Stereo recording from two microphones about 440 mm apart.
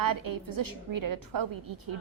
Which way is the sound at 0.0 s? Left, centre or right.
Right.